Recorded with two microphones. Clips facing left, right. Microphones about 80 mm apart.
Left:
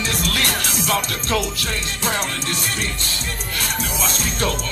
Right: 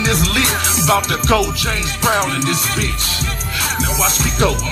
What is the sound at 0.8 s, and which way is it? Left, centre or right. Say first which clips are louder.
Music: right 9 dB; right.